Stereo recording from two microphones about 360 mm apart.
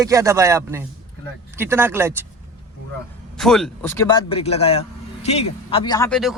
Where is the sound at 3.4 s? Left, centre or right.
Centre.